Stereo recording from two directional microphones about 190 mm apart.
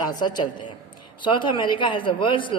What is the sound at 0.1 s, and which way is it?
A man's voice, 20° left (ahead or behind).